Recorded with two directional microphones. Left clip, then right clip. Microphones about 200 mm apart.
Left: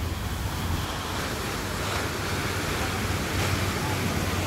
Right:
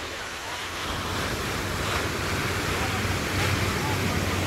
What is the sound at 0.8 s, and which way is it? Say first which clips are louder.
Vehicle: right 3 dB; 55° left (ahead or behind).